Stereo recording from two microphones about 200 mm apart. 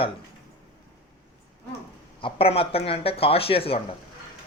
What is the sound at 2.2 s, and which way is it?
Speech, 30° left (ahead or behind).